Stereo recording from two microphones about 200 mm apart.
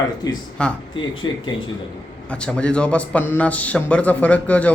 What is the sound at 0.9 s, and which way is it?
Speech, 25° left (ahead or behind).